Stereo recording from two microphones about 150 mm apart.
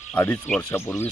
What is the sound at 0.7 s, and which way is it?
Speech, 15° left (ahead or behind).